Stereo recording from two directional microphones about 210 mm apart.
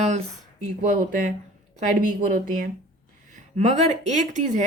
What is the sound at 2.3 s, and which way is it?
Speech, 40° right (ahead or behind).